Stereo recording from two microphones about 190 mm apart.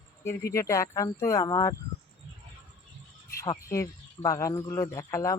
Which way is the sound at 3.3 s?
15° left (ahead or behind).